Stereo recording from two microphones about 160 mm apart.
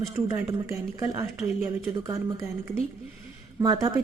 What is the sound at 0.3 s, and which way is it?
A woman's voice, 20° right (ahead or behind).